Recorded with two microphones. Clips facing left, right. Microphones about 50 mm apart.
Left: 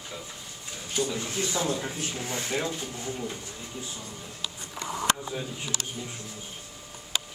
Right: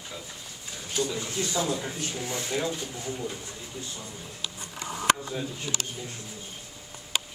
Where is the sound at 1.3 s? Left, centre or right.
Left.